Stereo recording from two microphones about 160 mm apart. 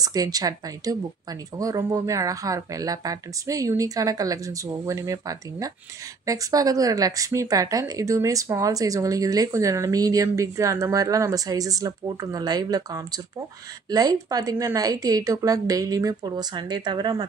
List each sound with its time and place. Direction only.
0.0 s speech: 25° right (ahead or behind)